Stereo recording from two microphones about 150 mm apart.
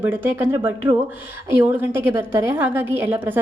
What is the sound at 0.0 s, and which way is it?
A woman's voice, 15° right (ahead or behind).